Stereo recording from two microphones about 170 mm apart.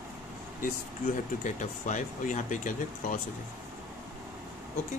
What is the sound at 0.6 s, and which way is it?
Speech, 50° left (ahead or behind).